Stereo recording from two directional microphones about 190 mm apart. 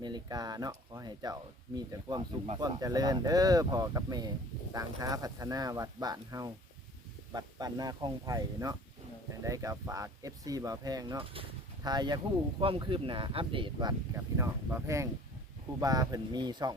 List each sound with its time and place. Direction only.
0.0 s speech: 20° right (ahead or behind)
14.2 s speech: 15° right (ahead or behind)